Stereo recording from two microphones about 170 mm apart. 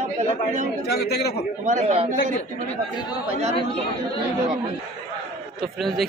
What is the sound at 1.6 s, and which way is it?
Speech, 40° right (ahead or behind).